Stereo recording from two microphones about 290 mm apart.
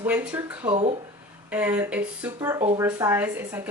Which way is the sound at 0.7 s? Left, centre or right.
Centre.